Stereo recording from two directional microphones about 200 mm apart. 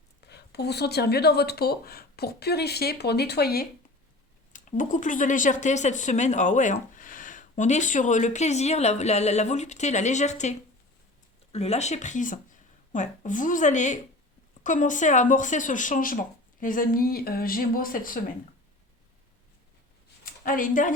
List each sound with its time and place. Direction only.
0.2 s speech: 55° left (ahead or behind)
4.5 s speech: 40° left (ahead or behind)
11.5 s speech: 30° left (ahead or behind)
20.2 s speech: 45° left (ahead or behind)